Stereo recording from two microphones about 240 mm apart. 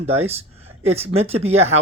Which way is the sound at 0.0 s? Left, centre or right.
Right.